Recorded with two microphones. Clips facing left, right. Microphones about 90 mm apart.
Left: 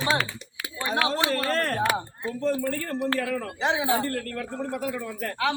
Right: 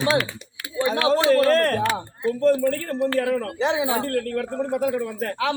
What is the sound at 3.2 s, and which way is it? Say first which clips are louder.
A man's voice: right 5 dB; 90° right.